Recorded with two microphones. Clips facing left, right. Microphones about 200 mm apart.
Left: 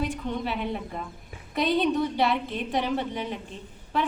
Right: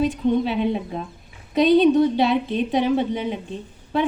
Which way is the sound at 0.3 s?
20° right (ahead or behind).